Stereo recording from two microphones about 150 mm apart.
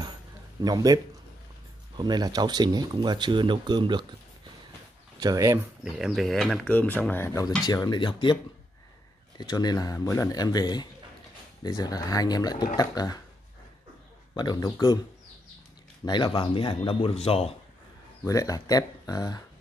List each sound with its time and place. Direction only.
0.6 s speech: 25° right (ahead or behind)
5.2 s speech: 20° right (ahead or behind)
5.9 s speech: 5° right (ahead or behind); by 8.4 s 30° left (ahead or behind)
9.4 s speech: 25° left (ahead or behind)
14.3 s speech: 30° left (ahead or behind)
16.1 s speech: 30° left (ahead or behind)
18.2 s speech: 20° left (ahead or behind)